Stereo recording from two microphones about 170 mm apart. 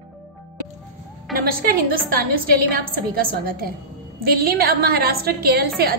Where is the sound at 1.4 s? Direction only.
60° right (ahead or behind).